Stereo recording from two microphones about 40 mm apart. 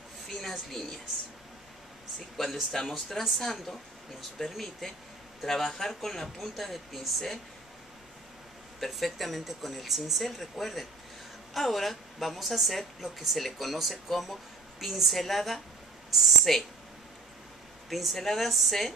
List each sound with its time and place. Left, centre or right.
0.3 s speech: centre
2.3 s a woman's voice: centre
8.7 s a woman's voice: centre
17.8 s a woman's voice: centre